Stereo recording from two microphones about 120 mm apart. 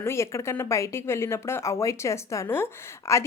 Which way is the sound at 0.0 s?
25° left (ahead or behind).